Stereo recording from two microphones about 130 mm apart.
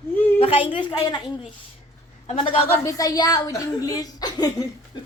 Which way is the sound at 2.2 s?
60° left (ahead or behind).